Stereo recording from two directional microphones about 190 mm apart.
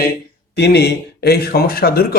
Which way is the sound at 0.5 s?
60° left (ahead or behind).